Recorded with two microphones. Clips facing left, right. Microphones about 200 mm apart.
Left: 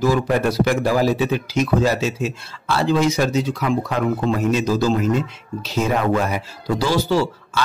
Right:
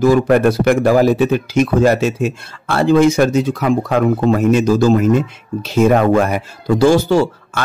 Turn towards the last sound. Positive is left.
turn(degrees=-50)  # may be behind; listen again after turning